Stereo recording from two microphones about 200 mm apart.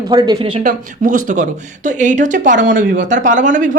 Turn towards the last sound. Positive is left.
turn(degrees=-40)  # may be behind; listen again after turning